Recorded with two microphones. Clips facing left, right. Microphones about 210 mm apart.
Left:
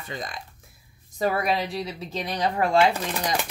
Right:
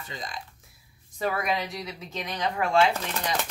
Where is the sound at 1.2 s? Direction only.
35° left (ahead or behind).